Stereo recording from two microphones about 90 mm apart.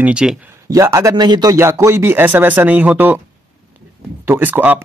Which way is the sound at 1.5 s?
30° right (ahead or behind).